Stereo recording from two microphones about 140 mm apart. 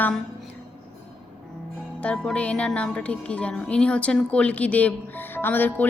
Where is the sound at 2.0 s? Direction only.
5° left (ahead or behind).